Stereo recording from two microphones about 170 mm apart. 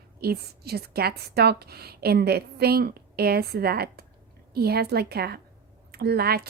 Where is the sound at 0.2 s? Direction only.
65° right (ahead or behind).